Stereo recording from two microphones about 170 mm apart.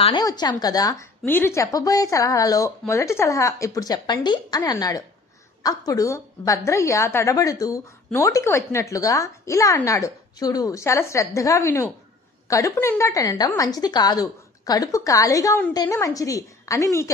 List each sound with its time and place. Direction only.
0.0 s a woman's voice: 25° left (ahead or behind)